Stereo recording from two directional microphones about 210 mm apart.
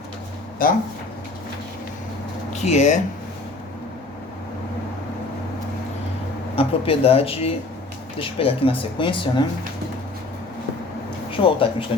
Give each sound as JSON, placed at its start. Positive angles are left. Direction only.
{"t": 0.6, "sound": "speech", "side_deg": 40}
{"t": 2.5, "sound": "speech", "side_deg": 35}
{"t": 6.6, "sound": "speech", "side_deg": 30}
{"t": 11.3, "sound": "speech", "side_deg": 25}